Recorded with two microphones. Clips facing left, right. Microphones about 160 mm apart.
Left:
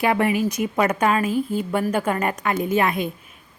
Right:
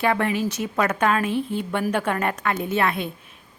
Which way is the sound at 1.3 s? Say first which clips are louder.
Left 2 dB; 40° left (ahead or behind).